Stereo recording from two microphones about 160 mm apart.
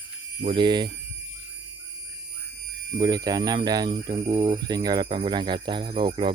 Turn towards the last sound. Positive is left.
turn(degrees=-30)  # may be behind; listen again after turning